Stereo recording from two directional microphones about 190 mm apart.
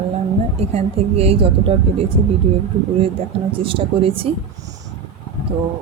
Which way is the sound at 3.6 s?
25° right (ahead or behind).